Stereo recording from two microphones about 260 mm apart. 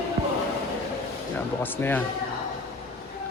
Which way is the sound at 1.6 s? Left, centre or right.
Centre.